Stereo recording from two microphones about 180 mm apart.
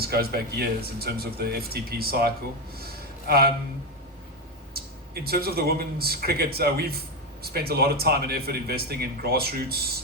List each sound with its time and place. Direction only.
0.0 s a man's voice: 60° right (ahead or behind)
2.7 s a sound: 60° right (ahead or behind)
5.2 s a man's voice: 60° right (ahead or behind)